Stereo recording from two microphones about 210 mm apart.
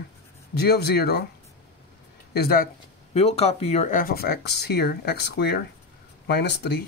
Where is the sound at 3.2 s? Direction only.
30° left (ahead or behind).